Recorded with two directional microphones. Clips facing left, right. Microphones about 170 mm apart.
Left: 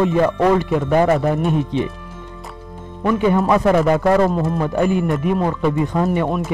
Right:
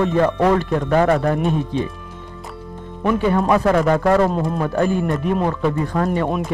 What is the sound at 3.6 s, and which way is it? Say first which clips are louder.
Speech: left 1 dB; 10° left (ahead or behind).